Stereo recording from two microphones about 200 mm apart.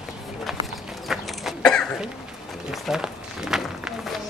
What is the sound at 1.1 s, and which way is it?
Cough, centre (ahead or behind).